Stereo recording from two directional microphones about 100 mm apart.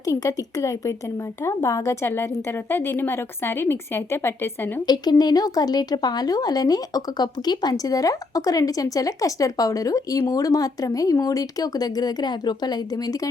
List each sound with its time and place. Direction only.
0.0 s a woman's voice: 35° left (ahead or behind)
4.9 s a woman's voice: 45° left (ahead or behind)